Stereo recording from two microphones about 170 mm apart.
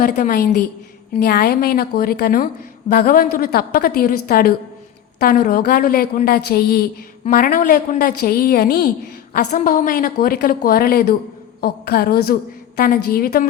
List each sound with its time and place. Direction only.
0.0 s a woman's voice: 55° left (ahead or behind)
7.3 s a woman's voice: 55° left (ahead or behind)
9.3 s a woman's voice: 45° left (ahead or behind)